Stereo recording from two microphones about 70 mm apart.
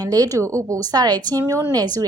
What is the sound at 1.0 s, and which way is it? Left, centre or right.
A woman's voice, right.